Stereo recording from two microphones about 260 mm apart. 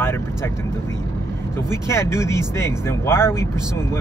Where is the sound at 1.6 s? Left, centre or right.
Centre.